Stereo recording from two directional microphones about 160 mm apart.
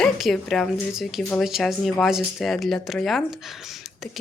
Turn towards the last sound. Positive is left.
turn(degrees=0)  # may be behind; listen again after turning